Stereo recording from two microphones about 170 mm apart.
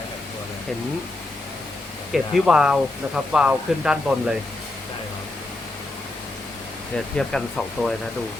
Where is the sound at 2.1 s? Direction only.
5° right (ahead or behind).